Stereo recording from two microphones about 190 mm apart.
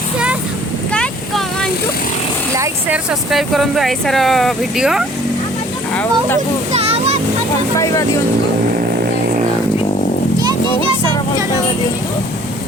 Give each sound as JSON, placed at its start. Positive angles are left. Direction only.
{"t": 0.9, "sound": "vehicle", "side_deg": 5}
{"t": 2.6, "sound": "speech", "side_deg": -5}
{"t": 5.9, "sound": "speech", "side_deg": 10}
{"t": 6.7, "sound": "a sound", "side_deg": -30}